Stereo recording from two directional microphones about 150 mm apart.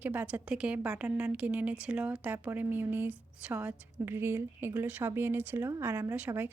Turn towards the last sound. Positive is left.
turn(degrees=-10)  # may be behind; listen again after turning